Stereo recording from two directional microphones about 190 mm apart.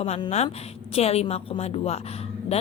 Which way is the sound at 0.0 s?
35° left (ahead or behind).